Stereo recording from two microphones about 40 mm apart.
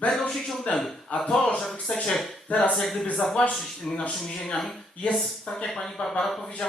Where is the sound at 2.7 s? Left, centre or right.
Centre.